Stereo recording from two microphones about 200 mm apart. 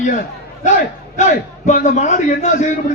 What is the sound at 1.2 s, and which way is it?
A man's voice, 35° left (ahead or behind).